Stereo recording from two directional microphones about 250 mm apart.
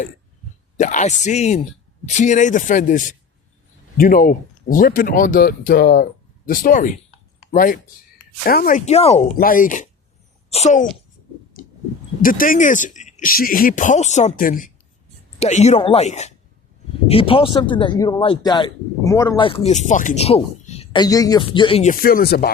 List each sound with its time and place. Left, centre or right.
0.8 s speech: left
12.2 s speech: left